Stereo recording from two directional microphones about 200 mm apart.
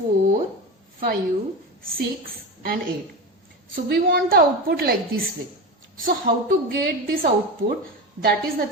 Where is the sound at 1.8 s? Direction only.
45° right (ahead or behind).